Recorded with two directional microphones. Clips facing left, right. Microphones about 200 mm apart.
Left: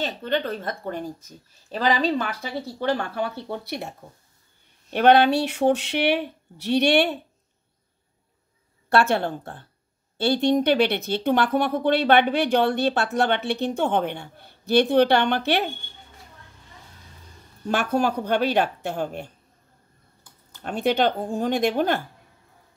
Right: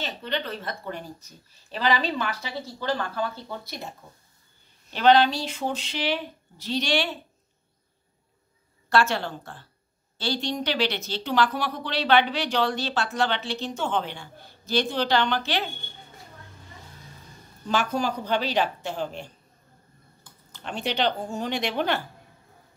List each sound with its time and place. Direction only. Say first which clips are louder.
0.0 s a woman's voice: left 5 dB; 50° left (ahead or behind); by 3.9 s 70° left (ahead or behind)
4.9 s speech: left 3 dB; 60° left (ahead or behind)
8.9 s speech: left 3 dB; 55° left (ahead or behind)
17.6 s speech: left 3 dB; 60° left (ahead or behind)
20.6 s a woman's voice: left 5 dB; 50° left (ahead or behind)